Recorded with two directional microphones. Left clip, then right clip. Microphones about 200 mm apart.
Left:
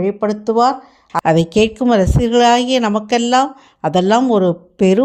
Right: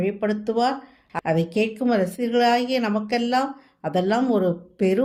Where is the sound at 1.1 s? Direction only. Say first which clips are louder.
Left 9 dB; 40° left (ahead or behind).